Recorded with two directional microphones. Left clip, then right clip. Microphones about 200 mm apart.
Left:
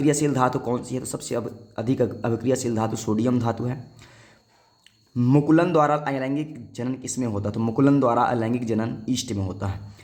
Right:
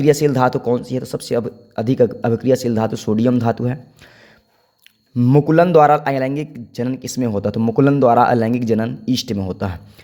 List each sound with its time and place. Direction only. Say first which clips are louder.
0.0 s speech: right 7 dB; 30° right (ahead or behind)
5.1 s a man's voice: right 6 dB; 25° right (ahead or behind)